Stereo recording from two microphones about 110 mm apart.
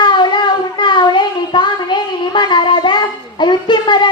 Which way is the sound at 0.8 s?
45° left (ahead or behind).